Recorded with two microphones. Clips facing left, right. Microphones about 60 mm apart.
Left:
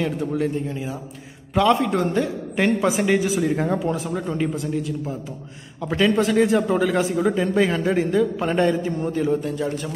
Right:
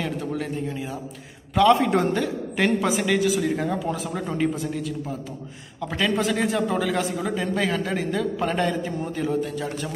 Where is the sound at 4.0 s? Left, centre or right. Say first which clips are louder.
Left 1 dB; centre.